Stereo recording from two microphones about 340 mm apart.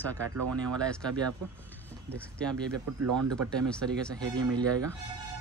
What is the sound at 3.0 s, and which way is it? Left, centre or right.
Speech, right.